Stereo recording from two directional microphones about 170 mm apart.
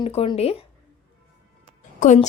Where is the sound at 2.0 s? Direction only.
45° left (ahead or behind).